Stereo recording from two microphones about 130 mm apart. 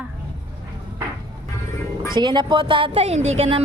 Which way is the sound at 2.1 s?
35° right (ahead or behind).